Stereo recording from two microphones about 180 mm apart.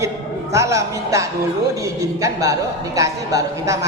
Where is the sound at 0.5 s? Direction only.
15° right (ahead or behind).